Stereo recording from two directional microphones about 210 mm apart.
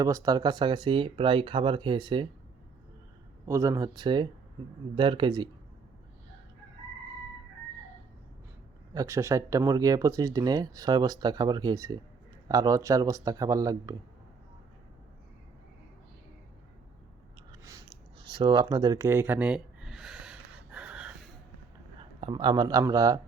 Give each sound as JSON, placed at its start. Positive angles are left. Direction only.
{"t": 0.0, "sound": "speech", "side_deg": -15}
{"t": 3.4, "sound": "speech", "side_deg": -15}
{"t": 8.9, "sound": "speech", "side_deg": -15}
{"t": 17.5, "sound": "a sound", "side_deg": -15}
{"t": 21.9, "sound": "speech", "side_deg": -25}